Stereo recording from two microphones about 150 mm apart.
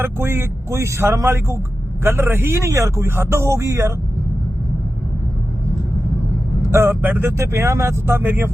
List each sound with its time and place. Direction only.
0.0 s speech: 15° right (ahead or behind)
6.7 s speech: 15° right (ahead or behind)